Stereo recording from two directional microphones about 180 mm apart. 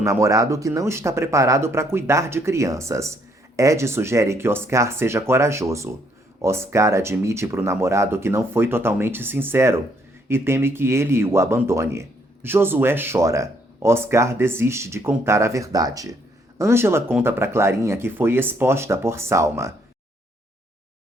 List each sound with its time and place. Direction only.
0.0 s speech: 15° right (ahead or behind)